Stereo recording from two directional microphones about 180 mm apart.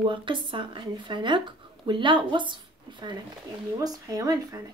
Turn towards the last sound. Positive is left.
turn(degrees=-20)  # may be behind; listen again after turning